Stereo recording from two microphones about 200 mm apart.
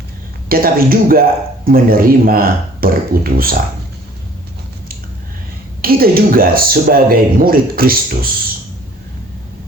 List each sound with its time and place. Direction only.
0.4 s speech: 45° right (ahead or behind)
5.8 s speech: 50° right (ahead or behind)